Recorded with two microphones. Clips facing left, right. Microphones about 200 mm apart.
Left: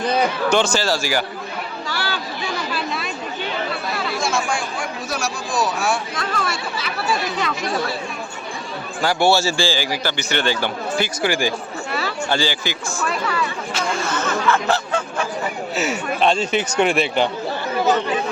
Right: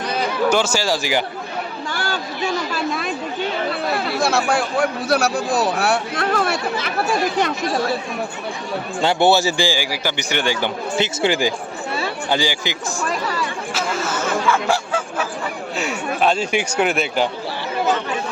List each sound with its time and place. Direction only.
0.5 s a man's voice: 10° right (ahead or behind)
1.9 s a sound: 50° right (ahead or behind)
2.7 s chatter: 50° right (ahead or behind)
3.9 s speech: 60° right (ahead or behind)
9.0 s a man's voice: 25° right (ahead or behind)
11.9 s a sound: 25° right (ahead or behind)
12.4 s a man's voice: 15° right (ahead or behind)
13.0 s speech: 35° right (ahead or behind)
13.7 s a sound: 5° right (ahead or behind)
15.8 s speech: centre (ahead or behind)